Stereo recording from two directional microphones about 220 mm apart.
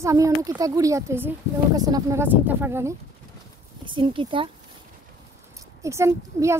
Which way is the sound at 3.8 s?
20° right (ahead or behind).